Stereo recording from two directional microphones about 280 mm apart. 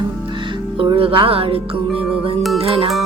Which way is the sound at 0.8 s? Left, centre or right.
Centre.